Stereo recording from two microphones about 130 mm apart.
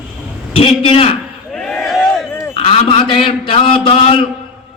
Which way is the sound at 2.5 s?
40° left (ahead or behind).